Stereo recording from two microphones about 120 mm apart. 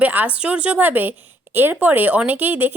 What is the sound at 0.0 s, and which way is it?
Speech, 15° right (ahead or behind).